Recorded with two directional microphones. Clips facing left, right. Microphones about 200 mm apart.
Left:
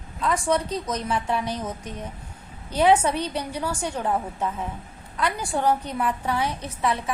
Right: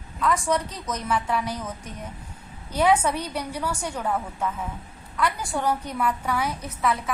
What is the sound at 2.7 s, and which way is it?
A woman's voice, 30° left (ahead or behind).